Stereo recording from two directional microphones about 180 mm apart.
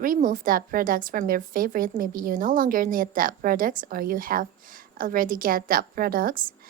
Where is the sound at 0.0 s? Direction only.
50° right (ahead or behind).